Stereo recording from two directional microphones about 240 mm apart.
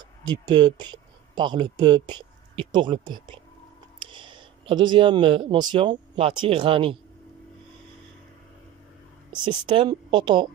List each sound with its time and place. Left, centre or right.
0.0 s speech: centre
9.3 s speech: centre